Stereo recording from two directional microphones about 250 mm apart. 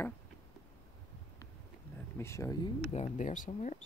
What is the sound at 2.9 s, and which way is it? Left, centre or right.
Speech, left.